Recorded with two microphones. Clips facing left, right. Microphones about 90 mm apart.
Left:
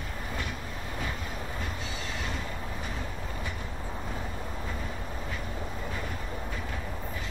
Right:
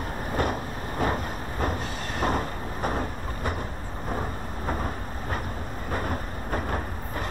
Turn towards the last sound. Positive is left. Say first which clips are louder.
# right 6 dB
turn(degrees=-50)  # may be behind; listen again after turning